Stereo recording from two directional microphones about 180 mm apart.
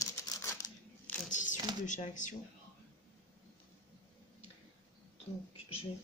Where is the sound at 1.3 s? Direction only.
45° left (ahead or behind).